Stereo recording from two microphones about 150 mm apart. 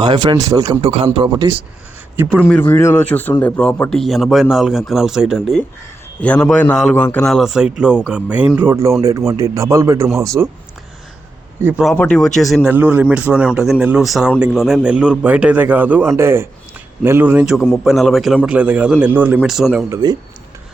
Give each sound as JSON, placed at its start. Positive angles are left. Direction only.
{"t": 0.0, "sound": "speech", "side_deg": -30}
{"t": 0.8, "sound": "speech", "side_deg": -40}
{"t": 2.4, "sound": "a man's voice", "side_deg": 10}
{"t": 11.9, "sound": "a man's voice", "side_deg": 5}
{"t": 12.7, "sound": "a man's voice", "side_deg": -10}
{"t": 19.9, "sound": "speech", "side_deg": -25}